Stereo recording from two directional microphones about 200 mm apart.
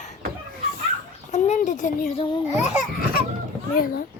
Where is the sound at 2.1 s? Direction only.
25° left (ahead or behind).